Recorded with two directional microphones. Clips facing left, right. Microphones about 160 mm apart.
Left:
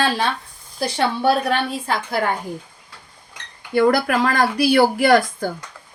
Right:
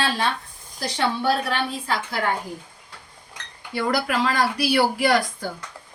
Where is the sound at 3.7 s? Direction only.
50° left (ahead or behind).